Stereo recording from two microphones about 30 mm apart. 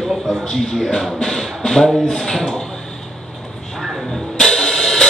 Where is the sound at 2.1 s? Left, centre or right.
Centre.